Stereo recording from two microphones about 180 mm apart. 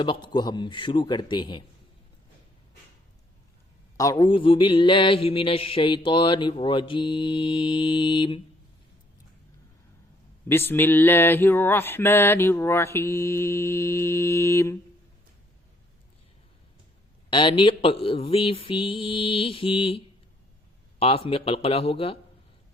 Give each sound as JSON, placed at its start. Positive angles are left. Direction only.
{"t": 0.0, "sound": "mantra", "side_deg": 25}
{"t": 3.9, "sound": "mantra", "side_deg": 20}
{"t": 10.5, "sound": "a sound", "side_deg": 10}
{"t": 17.2, "sound": "speech", "side_deg": 25}
{"t": 21.0, "sound": "speech", "side_deg": 30}